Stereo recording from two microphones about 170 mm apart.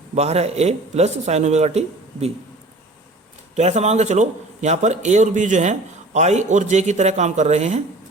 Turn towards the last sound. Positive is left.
turn(degrees=-40)  # may be behind; listen again after turning